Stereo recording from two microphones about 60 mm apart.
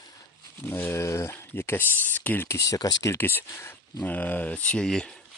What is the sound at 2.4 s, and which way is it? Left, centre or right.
Speech, left.